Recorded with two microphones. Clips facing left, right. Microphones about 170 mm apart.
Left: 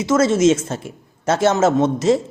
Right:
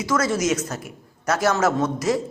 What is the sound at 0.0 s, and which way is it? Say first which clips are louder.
A woman's voice: left 7 dB; 25° left (ahead or behind).